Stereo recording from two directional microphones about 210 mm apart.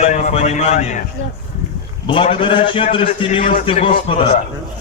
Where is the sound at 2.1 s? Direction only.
25° left (ahead or behind).